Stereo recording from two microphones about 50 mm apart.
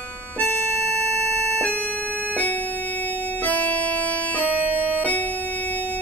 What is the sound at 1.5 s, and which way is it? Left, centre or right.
Keyboard, left.